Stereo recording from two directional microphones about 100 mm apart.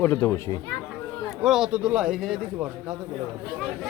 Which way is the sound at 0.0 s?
25° left (ahead or behind).